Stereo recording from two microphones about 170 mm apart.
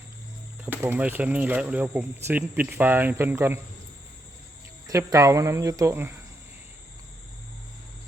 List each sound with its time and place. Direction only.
0.6 s speech: 10° right (ahead or behind)
4.9 s speech: 20° right (ahead or behind)